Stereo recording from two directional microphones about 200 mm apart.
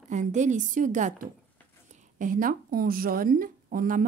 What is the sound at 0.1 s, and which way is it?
A woman's voice, 35° right (ahead or behind).